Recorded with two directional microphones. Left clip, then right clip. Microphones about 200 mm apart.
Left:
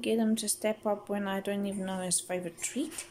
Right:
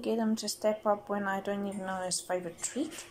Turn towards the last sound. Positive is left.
turn(degrees=15)  # may be behind; listen again after turning